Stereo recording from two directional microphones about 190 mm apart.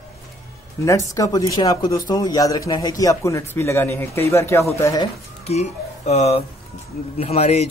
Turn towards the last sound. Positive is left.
turn(degrees=35)  # may be behind; listen again after turning